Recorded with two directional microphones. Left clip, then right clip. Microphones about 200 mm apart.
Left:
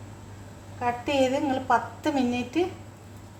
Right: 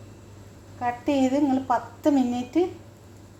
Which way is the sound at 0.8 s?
20° right (ahead or behind).